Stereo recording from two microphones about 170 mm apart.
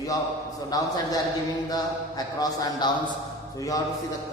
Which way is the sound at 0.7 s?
20° left (ahead or behind).